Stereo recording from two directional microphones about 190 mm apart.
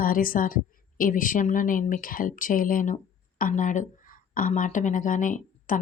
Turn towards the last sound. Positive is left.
turn(degrees=45)  # may be behind; listen again after turning